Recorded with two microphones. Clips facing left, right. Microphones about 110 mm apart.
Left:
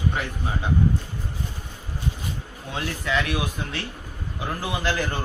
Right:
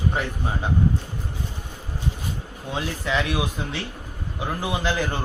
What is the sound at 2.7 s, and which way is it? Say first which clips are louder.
A man's voice: right 1 dB; 20° right (ahead or behind).